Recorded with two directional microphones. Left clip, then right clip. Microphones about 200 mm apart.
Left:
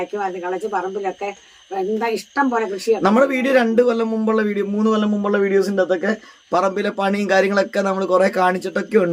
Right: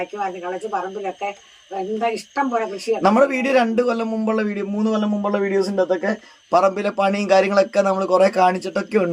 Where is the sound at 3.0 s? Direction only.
Centre (ahead or behind).